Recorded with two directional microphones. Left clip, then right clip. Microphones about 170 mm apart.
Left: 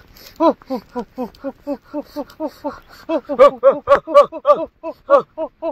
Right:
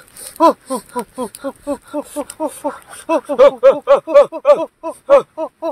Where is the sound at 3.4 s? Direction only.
35° right (ahead or behind).